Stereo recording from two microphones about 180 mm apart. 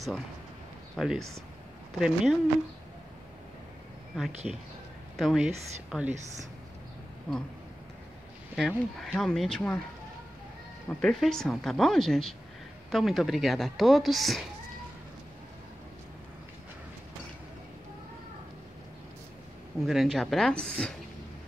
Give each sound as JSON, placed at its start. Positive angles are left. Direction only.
{"t": 0.9, "sound": "speech", "side_deg": 0}
{"t": 4.4, "sound": "speech", "side_deg": 0}
{"t": 7.3, "sound": "speech", "side_deg": 5}
{"t": 8.5, "sound": "speech", "side_deg": 0}
{"t": 10.9, "sound": "speech", "side_deg": 5}
{"t": 19.9, "sound": "speech", "side_deg": 0}